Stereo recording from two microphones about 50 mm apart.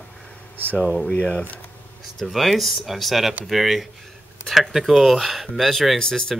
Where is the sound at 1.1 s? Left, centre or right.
Left.